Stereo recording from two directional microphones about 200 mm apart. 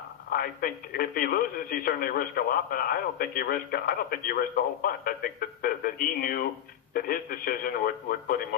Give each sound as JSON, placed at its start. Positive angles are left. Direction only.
{"t": 0.3, "sound": "speech", "side_deg": 45}